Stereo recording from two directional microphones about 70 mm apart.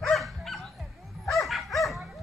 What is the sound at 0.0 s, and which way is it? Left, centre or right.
Dog, centre.